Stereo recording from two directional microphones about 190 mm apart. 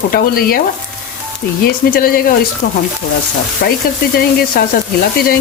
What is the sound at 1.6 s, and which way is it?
Stir, 50° left (ahead or behind).